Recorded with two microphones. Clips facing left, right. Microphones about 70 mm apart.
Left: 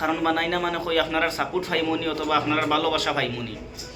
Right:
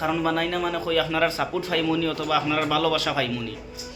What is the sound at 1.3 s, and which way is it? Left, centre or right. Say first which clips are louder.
A man's voice: even; left.